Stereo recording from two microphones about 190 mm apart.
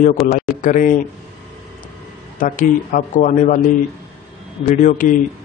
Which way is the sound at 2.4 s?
45° left (ahead or behind).